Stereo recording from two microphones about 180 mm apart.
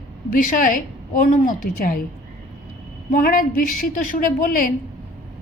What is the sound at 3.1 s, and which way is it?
A woman's voice, 50° left (ahead or behind).